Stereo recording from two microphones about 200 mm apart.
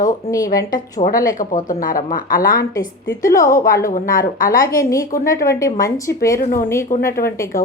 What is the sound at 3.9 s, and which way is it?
Speech, 45° left (ahead or behind).